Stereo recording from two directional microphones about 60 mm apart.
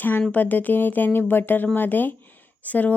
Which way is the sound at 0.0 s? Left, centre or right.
Left.